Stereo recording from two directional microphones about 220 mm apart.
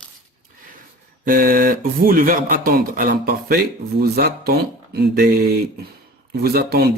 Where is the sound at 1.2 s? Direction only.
40° right (ahead or behind).